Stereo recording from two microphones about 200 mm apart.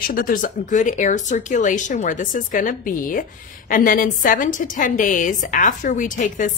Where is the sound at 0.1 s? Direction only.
45° left (ahead or behind).